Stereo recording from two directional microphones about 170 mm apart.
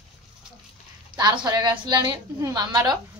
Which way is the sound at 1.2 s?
25° right (ahead or behind).